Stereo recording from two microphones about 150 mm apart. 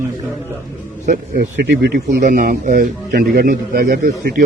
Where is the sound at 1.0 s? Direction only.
90° right.